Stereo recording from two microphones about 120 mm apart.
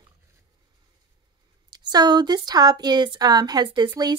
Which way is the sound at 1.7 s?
35° right (ahead or behind).